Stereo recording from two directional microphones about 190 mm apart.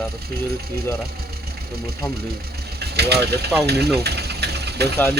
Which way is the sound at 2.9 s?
60° right (ahead or behind).